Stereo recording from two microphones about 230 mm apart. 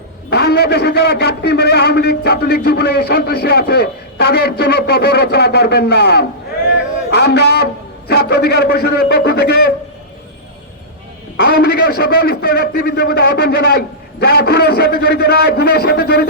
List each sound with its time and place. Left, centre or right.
0.3 s a man's voice: left
11.3 s a man's voice: left